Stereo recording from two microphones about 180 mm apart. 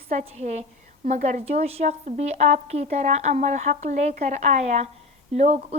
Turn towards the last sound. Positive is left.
turn(degrees=-35)  # may be behind; listen again after turning